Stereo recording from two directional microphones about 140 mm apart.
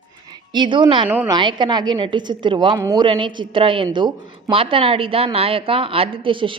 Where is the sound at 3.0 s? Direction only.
35° right (ahead or behind).